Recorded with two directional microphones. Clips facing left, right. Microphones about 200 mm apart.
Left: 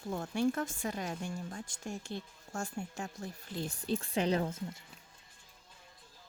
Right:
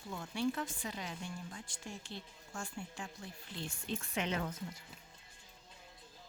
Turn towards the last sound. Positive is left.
turn(degrees=25)  # may be behind; listen again after turning